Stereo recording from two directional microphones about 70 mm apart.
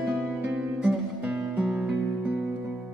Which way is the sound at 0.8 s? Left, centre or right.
Centre.